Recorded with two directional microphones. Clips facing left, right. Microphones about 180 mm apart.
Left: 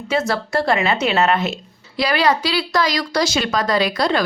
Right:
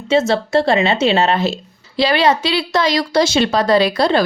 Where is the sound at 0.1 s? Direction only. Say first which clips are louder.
Right 6 dB; 25° right (ahead or behind).